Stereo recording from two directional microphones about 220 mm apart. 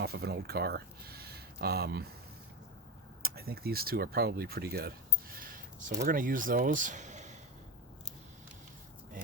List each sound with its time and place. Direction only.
0.0 s speech: 45° right (ahead or behind)
3.2 s speech: 45° right (ahead or behind)